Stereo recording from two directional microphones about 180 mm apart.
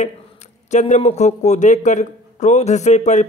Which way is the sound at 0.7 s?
40° left (ahead or behind).